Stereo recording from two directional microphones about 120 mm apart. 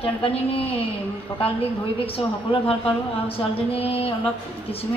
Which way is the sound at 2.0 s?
50° left (ahead or behind).